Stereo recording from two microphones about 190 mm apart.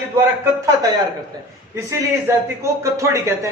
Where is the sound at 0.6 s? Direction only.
20° right (ahead or behind).